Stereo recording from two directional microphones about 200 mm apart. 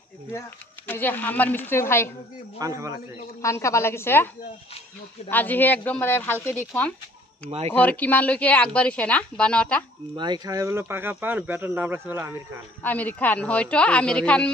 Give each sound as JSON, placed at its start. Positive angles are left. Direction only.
{"t": 0.3, "sound": "speech", "side_deg": 10}
{"t": 2.6, "sound": "speech", "side_deg": -15}
{"t": 3.4, "sound": "speech", "side_deg": 15}
{"t": 5.3, "sound": "speech", "side_deg": 10}
{"t": 7.4, "sound": "speech", "side_deg": -30}
{"t": 7.7, "sound": "speech", "side_deg": 10}
{"t": 10.1, "sound": "speech", "side_deg": -20}
{"t": 12.8, "sound": "speech", "side_deg": 10}